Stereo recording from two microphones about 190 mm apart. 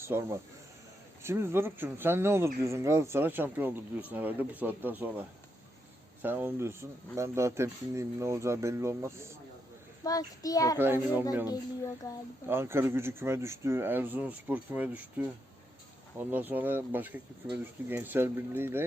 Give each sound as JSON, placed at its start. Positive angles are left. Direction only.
{"t": 0.0, "sound": "speech", "side_deg": -15}
{"t": 6.2, "sound": "speech", "side_deg": -10}
{"t": 10.0, "sound": "child singing", "side_deg": 20}
{"t": 10.8, "sound": "speech", "side_deg": -10}
{"t": 12.5, "sound": "speech", "side_deg": -15}